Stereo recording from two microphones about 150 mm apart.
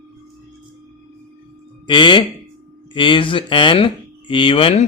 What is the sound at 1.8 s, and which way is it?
A man's voice, 30° left (ahead or behind).